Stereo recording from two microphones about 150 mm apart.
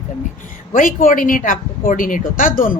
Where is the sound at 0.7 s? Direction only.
65° left (ahead or behind).